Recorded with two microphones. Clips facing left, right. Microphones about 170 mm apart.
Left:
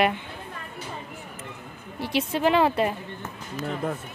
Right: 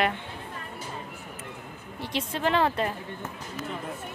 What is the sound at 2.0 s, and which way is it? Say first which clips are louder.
Speech: left 5 dB; 10° left (ahead or behind).